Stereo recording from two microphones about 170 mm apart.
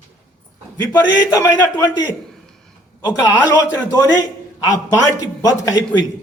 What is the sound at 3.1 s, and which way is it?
A man's voice, 20° left (ahead or behind).